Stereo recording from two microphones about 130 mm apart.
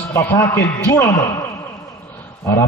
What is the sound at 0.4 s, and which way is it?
Speech, 25° left (ahead or behind).